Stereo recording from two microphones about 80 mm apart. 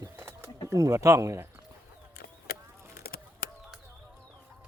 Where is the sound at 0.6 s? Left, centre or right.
Right.